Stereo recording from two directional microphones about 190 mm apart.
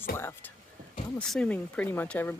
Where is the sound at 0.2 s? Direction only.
10° left (ahead or behind).